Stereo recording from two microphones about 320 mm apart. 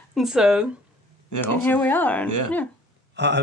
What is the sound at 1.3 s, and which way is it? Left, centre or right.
Speech, left.